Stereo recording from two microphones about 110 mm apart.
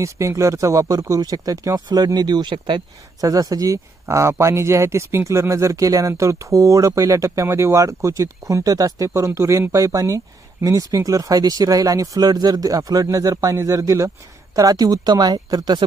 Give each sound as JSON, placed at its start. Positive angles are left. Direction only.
{"t": 0.0, "sound": "speech", "side_deg": -25}
{"t": 3.2, "sound": "speech", "side_deg": -35}